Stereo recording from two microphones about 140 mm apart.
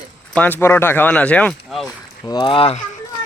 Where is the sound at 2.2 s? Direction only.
35° left (ahead or behind).